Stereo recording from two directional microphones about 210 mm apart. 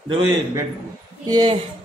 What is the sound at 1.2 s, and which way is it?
Speech, 20° right (ahead or behind).